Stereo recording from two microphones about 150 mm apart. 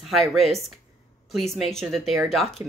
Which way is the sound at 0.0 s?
Centre (ahead or behind).